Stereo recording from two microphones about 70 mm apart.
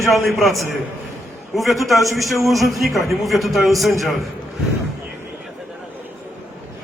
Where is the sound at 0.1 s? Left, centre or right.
Centre.